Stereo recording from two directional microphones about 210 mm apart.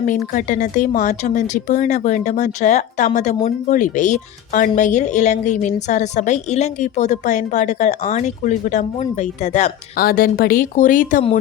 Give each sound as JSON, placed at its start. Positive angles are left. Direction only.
{"t": 0.3, "sound": "speech", "side_deg": 40}
{"t": 10.0, "sound": "speech", "side_deg": 45}